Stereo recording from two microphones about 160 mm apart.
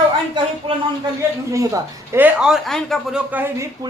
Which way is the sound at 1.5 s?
15° right (ahead or behind).